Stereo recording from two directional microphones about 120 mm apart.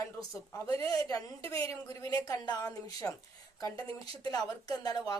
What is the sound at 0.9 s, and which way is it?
Speech, 30° left (ahead or behind).